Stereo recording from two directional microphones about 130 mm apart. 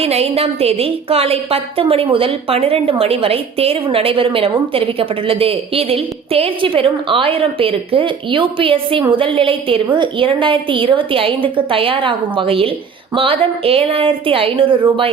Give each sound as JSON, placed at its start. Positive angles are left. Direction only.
{"t": 0.0, "sound": "a woman's voice", "side_deg": -50}